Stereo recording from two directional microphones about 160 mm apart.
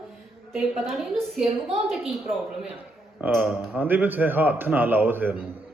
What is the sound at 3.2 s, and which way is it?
A man's voice, 5° right (ahead or behind).